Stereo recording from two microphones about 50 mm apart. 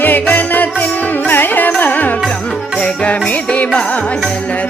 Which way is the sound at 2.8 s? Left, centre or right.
Left.